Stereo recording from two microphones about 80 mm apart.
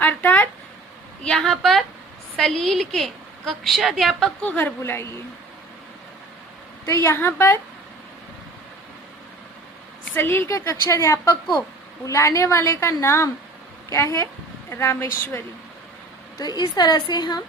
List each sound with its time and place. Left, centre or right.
0.0 s a sound: left
1.2 s a woman's voice: centre
4.4 s a woman's voice: centre
4.8 s a woman's voice: left
6.8 s a woman's voice: left
10.2 s a woman's voice: left
16.4 s a woman's voice: left